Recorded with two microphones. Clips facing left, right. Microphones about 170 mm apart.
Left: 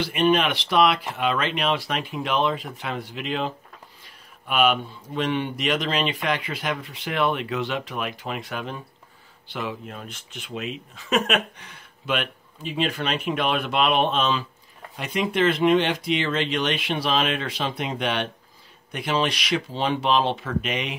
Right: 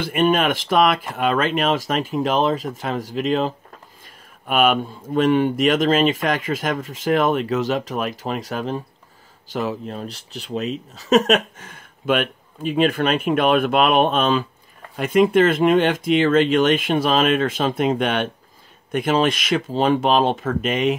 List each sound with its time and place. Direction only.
0.0 s speech: 50° right (ahead or behind)